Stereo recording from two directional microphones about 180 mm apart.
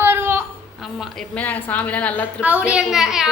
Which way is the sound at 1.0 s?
5° left (ahead or behind).